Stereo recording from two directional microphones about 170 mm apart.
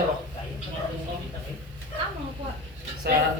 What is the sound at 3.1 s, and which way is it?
Speech, 70° right (ahead or behind).